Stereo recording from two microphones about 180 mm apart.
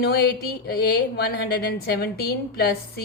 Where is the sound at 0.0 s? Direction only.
60° left (ahead or behind).